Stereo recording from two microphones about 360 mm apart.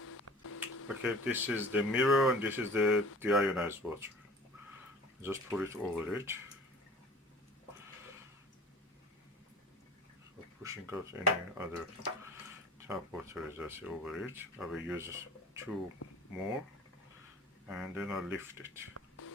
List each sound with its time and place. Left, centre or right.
0.0 s a sound: left
1.0 s speech: centre
5.2 s speech: centre
10.6 s speech: centre
12.9 s speech: centre
17.7 s speech: centre
18.9 s beatboxing: left